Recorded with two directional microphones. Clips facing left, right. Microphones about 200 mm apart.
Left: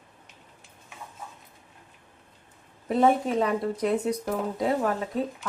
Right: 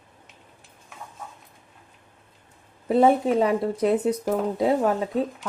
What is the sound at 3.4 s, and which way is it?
Speech, 30° right (ahead or behind).